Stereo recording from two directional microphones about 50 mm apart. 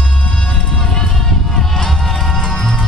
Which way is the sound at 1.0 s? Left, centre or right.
Centre.